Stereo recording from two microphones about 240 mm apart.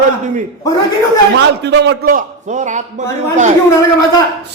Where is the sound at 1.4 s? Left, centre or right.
Right.